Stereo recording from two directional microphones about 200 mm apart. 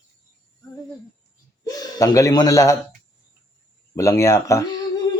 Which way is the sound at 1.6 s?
20° left (ahead or behind).